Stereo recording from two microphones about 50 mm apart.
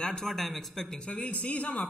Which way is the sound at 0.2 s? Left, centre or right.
Centre.